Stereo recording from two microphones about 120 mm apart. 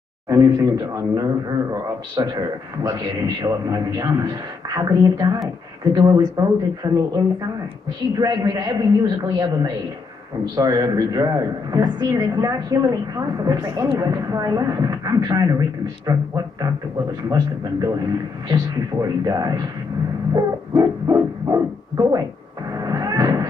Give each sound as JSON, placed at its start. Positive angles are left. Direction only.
{"t": 0.3, "sound": "speech", "side_deg": -30}
{"t": 8.2, "sound": "speech", "side_deg": -35}
{"t": 22.8, "sound": "a sound", "side_deg": -30}